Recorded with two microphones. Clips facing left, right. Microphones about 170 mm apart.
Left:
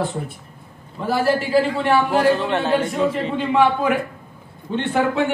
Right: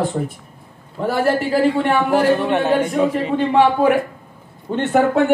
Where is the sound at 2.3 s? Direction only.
15° right (ahead or behind).